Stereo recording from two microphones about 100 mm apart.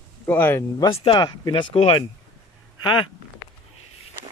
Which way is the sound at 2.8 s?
50° left (ahead or behind).